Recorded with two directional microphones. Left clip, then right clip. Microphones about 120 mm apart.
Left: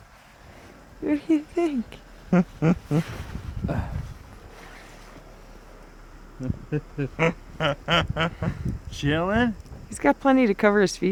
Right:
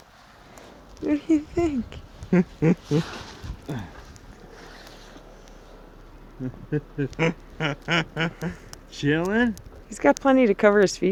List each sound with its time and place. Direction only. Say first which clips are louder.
1.0 s speech: right 1 dB; 40° left (ahead or behind)
6.7 s speech: right 3 dB; 20° left (ahead or behind)
10.3 s speech: right 2 dB; 40° left (ahead or behind)